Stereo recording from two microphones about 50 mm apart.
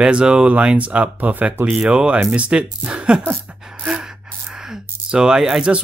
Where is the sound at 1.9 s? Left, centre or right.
Right.